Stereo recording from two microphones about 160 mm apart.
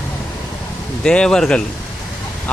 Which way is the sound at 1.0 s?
5° left (ahead or behind).